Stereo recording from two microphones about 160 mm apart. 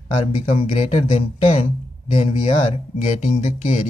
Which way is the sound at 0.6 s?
40° left (ahead or behind).